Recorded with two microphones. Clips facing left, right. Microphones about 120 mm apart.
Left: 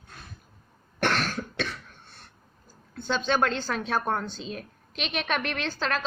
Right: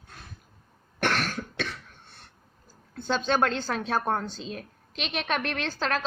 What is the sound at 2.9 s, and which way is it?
A woman's voice, 40° right (ahead or behind).